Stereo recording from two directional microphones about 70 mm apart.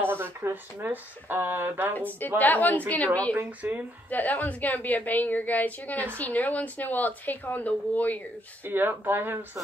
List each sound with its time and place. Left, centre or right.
0.0 s speech: right
2.0 s a woman's voice: left
3.3 s speech: right
4.1 s a woman's voice: left
8.6 s speech: right